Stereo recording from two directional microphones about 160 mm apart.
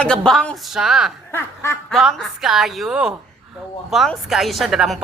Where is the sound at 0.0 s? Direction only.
5° left (ahead or behind).